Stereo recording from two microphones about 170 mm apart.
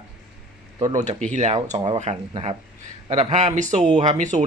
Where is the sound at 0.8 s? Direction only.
25° right (ahead or behind).